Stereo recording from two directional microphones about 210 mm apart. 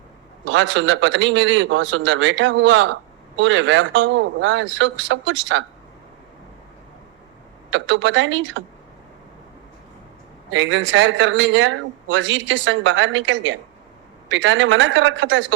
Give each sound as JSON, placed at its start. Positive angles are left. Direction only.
{"t": 0.4, "sound": "a man's voice", "side_deg": -65}
{"t": 7.7, "sound": "a man's voice", "side_deg": -65}
{"t": 10.5, "sound": "a man's voice", "side_deg": -65}